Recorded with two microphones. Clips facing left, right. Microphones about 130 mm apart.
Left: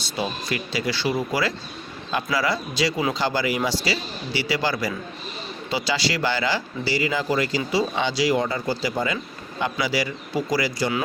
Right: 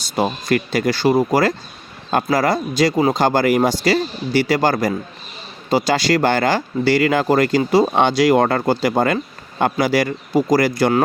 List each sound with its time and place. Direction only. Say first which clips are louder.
0.0 s speech: right 7 dB; 50° right (ahead or behind)